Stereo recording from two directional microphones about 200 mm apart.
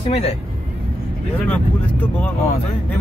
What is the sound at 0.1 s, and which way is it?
Speech, 30° left (ahead or behind).